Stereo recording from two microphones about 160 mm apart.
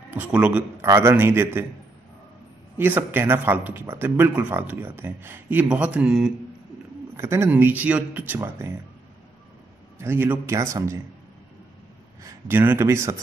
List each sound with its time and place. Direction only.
0.1 s speech: 10° right (ahead or behind)
2.8 s speech: 10° right (ahead or behind)
7.2 s speech: 15° right (ahead or behind)
9.9 s speech: 15° right (ahead or behind)
12.2 s speech: 15° right (ahead or behind)